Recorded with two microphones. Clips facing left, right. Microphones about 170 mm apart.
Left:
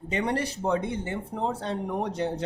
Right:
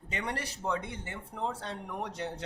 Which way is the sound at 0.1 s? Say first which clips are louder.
Left 9 dB; 25° left (ahead or behind).